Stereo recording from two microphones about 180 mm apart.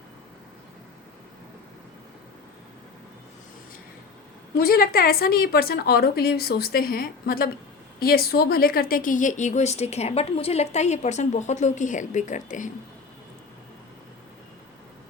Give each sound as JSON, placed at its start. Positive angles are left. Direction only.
{"t": 4.5, "sound": "a woman's voice", "side_deg": 55}